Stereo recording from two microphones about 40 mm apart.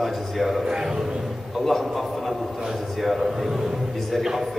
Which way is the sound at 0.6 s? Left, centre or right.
Centre.